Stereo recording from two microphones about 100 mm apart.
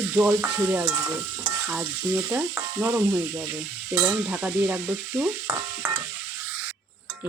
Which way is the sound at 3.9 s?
20° right (ahead or behind).